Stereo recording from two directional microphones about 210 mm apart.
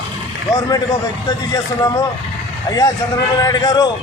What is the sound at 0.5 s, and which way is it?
A man's voice, 15° left (ahead or behind).